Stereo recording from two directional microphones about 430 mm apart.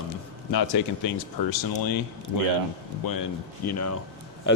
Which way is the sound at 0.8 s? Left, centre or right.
Left.